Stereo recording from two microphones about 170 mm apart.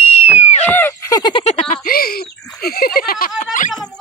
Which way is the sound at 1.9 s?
60° left (ahead or behind).